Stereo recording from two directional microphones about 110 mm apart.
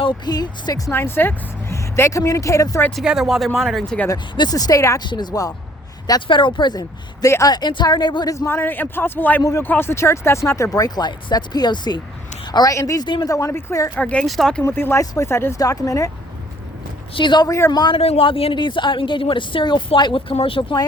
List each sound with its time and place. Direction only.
0.0 s speech: 40° left (ahead or behind)
0.9 s speech: 20° left (ahead or behind)
2.9 s speech: 5° right (ahead or behind)
4.1 s speech: 35° left (ahead or behind)
5.0 s speech: 40° left (ahead or behind)
6.1 s speech: 45° left (ahead or behind)
7.3 s speech: 25° left (ahead or behind)
7.5 s speech: 45° left (ahead or behind)
8.4 s speech: 20° left (ahead or behind)
9.4 s speech: 30° left (ahead or behind)
13.9 s speech: 10° left (ahead or behind)
14.6 s speech: 20° left (ahead or behind)
17.2 s speech: 45° left (ahead or behind)
17.9 s speech: 60° left (ahead or behind)